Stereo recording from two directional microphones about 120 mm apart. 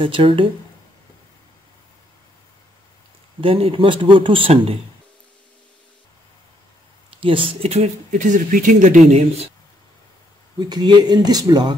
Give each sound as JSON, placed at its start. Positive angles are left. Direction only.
{"t": 0.0, "sound": "speech", "side_deg": -45}
{"t": 3.3, "sound": "speech", "side_deg": -50}
{"t": 7.1, "sound": "speech", "side_deg": -50}
{"t": 10.6, "sound": "speech", "side_deg": -40}